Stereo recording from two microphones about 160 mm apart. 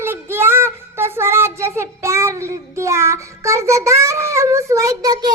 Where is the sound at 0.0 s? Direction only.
15° right (ahead or behind).